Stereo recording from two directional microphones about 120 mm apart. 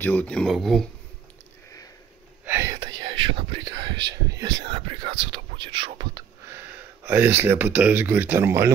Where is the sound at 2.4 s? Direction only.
20° right (ahead or behind).